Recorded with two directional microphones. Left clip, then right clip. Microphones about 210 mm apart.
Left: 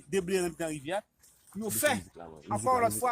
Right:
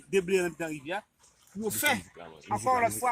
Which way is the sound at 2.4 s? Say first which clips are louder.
Right 1 dB; 20° left (ahead or behind).